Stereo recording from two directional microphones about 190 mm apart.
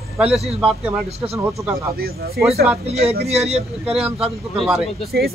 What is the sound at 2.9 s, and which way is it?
A man's voice, 35° right (ahead or behind).